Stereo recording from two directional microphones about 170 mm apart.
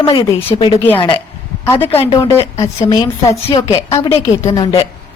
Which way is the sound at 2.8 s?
35° left (ahead or behind).